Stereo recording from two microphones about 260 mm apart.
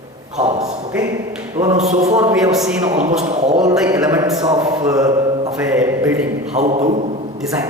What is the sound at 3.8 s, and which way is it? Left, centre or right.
A man's voice, centre.